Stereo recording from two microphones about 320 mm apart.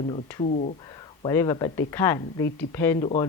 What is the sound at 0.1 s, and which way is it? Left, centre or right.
Speech, centre.